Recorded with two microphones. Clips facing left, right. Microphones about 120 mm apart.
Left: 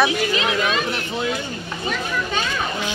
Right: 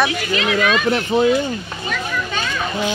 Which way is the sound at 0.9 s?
45° right (ahead or behind).